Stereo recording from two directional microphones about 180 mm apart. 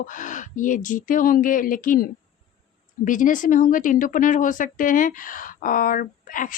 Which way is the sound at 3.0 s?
45° left (ahead or behind).